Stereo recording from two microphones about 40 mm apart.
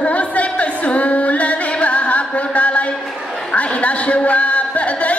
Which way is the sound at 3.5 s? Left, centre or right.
Left.